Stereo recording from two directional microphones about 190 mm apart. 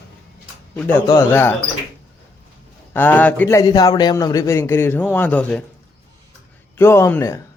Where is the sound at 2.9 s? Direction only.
10° left (ahead or behind).